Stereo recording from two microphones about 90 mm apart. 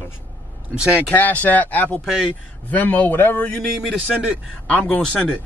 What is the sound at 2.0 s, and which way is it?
Speech, 5° right (ahead or behind).